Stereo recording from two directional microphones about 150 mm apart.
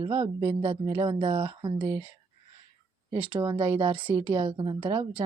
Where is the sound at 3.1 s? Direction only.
35° right (ahead or behind).